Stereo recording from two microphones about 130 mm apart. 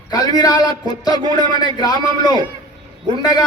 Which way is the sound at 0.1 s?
30° left (ahead or behind).